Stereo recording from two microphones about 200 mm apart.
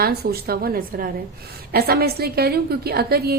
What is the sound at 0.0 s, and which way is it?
A woman's voice, 50° right (ahead or behind).